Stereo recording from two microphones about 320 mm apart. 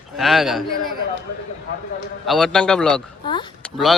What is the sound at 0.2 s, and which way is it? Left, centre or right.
Speech, centre.